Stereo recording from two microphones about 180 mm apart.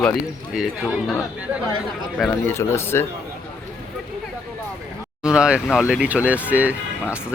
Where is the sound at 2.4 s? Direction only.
15° left (ahead or behind).